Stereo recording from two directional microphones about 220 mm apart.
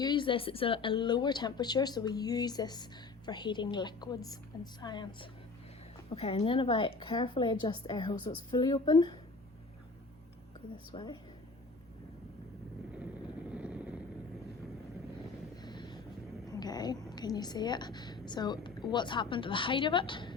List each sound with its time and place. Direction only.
0.0 s a woman's voice: 20° left (ahead or behind)
10.9 s a woman's voice: 20° left (ahead or behind)
13.5 s vehicle: 5° right (ahead or behind)
15.6 s vehicle: 20° left (ahead or behind)
16.5 s cat: 15° left (ahead or behind)
17.1 s a woman's voice: 20° left (ahead or behind)